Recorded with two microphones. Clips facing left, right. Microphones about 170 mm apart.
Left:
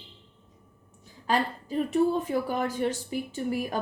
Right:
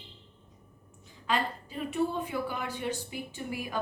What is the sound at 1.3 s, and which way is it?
A woman's voice, 40° left (ahead or behind).